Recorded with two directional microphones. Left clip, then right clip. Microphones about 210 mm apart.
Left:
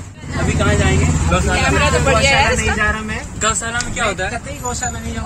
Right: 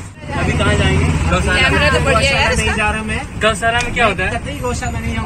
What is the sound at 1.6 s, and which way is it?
Speech, 40° left (ahead or behind).